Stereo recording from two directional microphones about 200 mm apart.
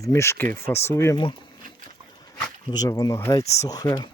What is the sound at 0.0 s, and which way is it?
Speech, 15° left (ahead or behind).